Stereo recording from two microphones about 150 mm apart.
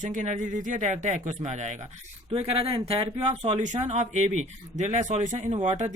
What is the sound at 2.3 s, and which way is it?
Speech, 40° right (ahead or behind).